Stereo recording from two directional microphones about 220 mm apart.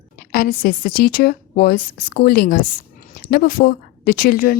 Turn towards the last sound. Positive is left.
turn(degrees=40)  # may be behind; listen again after turning